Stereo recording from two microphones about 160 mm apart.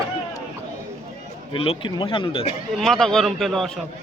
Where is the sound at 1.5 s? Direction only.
35° left (ahead or behind).